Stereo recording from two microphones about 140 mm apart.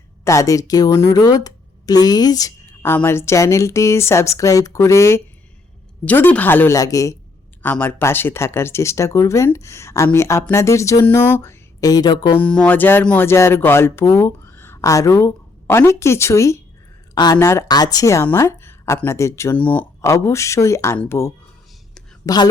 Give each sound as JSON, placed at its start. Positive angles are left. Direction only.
{"t": 0.3, "sound": "a woman's voice", "side_deg": 25}
{"t": 2.8, "sound": "a woman's voice", "side_deg": 15}
{"t": 6.7, "sound": "a woman's voice", "side_deg": 25}
{"t": 7.6, "sound": "a woman's voice", "side_deg": 10}
{"t": 11.8, "sound": "a woman's voice", "side_deg": 25}
{"t": 12.3, "sound": "a woman's voice", "side_deg": 10}
{"t": 17.4, "sound": "a woman's voice", "side_deg": 20}